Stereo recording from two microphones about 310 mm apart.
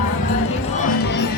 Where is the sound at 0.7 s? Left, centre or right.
Left.